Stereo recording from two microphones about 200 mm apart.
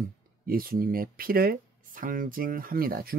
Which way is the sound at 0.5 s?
45° right (ahead or behind).